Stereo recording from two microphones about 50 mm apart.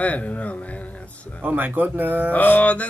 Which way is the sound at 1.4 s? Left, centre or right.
Right.